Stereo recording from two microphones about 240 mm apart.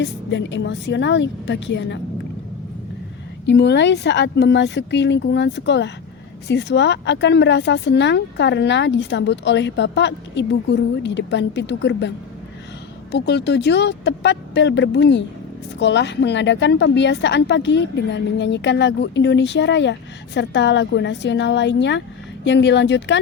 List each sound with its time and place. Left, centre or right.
0.0 s a woman's voice: left
3.4 s a woman's voice: left